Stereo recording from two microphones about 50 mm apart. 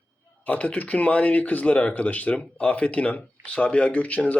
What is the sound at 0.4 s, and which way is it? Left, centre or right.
A man's voice, left.